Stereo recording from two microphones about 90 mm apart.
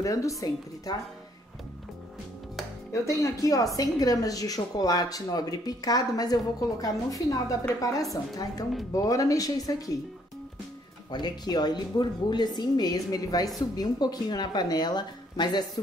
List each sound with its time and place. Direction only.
0.0 s a woman's voice: 40° left (ahead or behind)
2.9 s a woman's voice: 35° left (ahead or behind)
11.1 s speech: 55° left (ahead or behind)